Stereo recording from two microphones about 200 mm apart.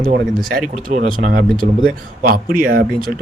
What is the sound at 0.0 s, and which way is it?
A man's voice, 45° right (ahead or behind).